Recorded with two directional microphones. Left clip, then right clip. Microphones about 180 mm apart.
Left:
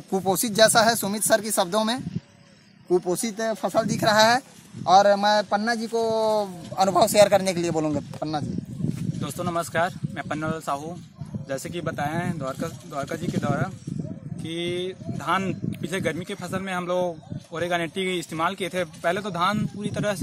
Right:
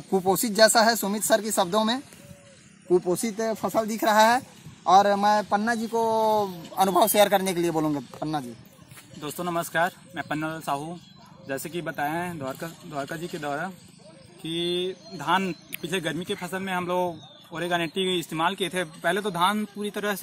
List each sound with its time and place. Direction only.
0.1 s speech: 10° left (ahead or behind); by 3.3 s 10° right (ahead or behind)
3.3 s speech: centre (ahead or behind)
3.7 s a man's voice: 15° left (ahead or behind); by 20.2 s 40° left (ahead or behind)